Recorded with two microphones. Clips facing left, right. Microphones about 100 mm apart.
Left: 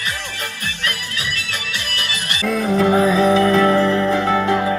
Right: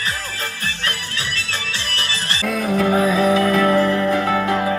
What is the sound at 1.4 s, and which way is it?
Music, 30° right (ahead or behind).